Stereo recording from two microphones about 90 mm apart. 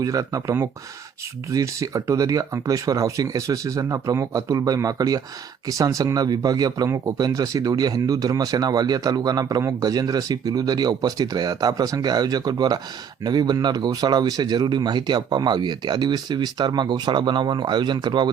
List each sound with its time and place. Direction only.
0.0 s speech: 40° right (ahead or behind)
6.8 s speech: 35° right (ahead or behind); by 18.3 s 55° right (ahead or behind)